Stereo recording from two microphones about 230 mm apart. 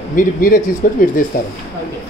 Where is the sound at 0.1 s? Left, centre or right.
Left.